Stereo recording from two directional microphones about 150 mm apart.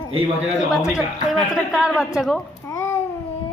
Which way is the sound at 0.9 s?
5° right (ahead or behind).